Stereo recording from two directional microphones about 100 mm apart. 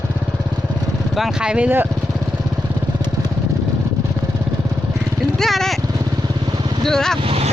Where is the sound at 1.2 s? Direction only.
10° right (ahead or behind).